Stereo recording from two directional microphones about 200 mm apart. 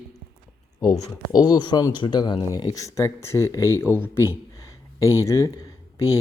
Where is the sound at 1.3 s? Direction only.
20° left (ahead or behind).